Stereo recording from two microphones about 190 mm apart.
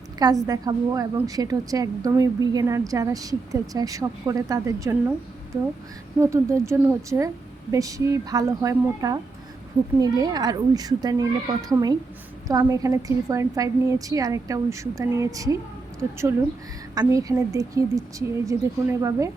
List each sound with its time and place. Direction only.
0.2 s a woman's voice: 20° right (ahead or behind)
6.1 s a woman's voice: 15° right (ahead or behind)